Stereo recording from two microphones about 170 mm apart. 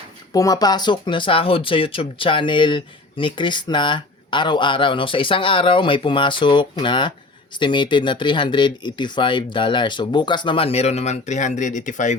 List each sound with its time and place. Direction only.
0.3 s speech: 20° left (ahead or behind); by 12.1 s 45° left (ahead or behind)